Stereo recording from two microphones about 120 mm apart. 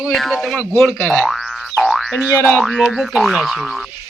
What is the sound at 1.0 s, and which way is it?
Boing, 10° left (ahead or behind).